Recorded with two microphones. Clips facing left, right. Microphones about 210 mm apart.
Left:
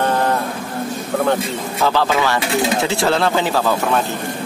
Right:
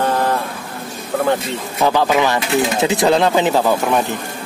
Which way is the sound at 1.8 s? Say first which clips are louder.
Right 2 dB; 15° right (ahead or behind).